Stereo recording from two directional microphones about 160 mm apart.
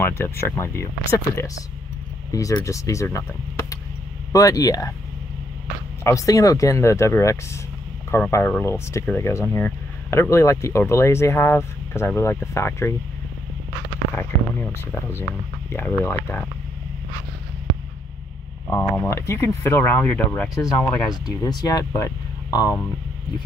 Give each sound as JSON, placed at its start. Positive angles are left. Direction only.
{"t": 0.0, "sound": "speech", "side_deg": 15}
{"t": 4.3, "sound": "speech", "side_deg": 20}
{"t": 6.0, "sound": "speech", "side_deg": 20}
{"t": 14.1, "sound": "speech", "side_deg": 10}
{"t": 18.7, "sound": "speech", "side_deg": 10}
{"t": 21.1, "sound": "speech", "side_deg": 25}